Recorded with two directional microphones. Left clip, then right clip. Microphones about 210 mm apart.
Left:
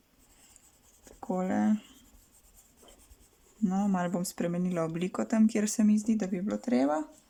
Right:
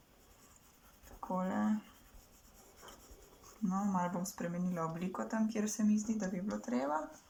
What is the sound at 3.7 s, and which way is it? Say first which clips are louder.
Speech: left 4 dB; 60° left (ahead or behind).